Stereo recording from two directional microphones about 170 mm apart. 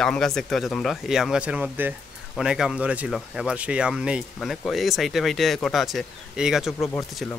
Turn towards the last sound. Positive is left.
turn(degrees=20)  # may be behind; listen again after turning